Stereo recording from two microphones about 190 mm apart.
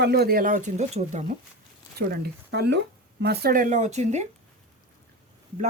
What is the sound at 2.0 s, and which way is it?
Speech, 55° right (ahead or behind).